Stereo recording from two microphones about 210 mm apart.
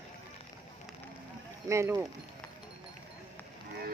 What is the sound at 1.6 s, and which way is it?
Speech, 15° right (ahead or behind).